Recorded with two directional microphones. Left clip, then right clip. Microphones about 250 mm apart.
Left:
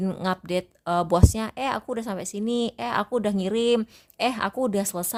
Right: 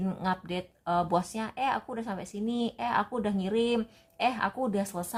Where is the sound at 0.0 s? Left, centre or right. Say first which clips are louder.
Left 4 dB; left.